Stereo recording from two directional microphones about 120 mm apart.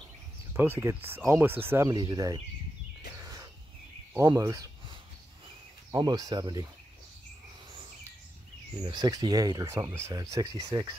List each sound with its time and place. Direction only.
0.5 s speech: 20° right (ahead or behind)
1.9 s speech: 35° right (ahead or behind)
3.2 s a sound: 30° right (ahead or behind)
4.1 s speech: 25° right (ahead or behind)
5.9 s speech: 35° right (ahead or behind)
8.8 s speech: 35° right (ahead or behind)